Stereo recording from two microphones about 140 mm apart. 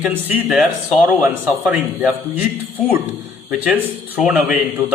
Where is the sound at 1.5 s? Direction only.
10° right (ahead or behind).